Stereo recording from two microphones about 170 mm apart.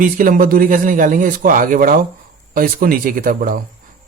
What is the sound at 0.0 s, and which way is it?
A man's voice, 55° right (ahead or behind).